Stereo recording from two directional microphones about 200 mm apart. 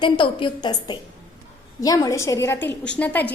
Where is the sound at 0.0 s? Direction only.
25° left (ahead or behind).